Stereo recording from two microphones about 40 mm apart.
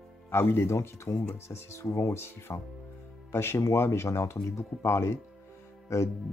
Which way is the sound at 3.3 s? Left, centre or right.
Left.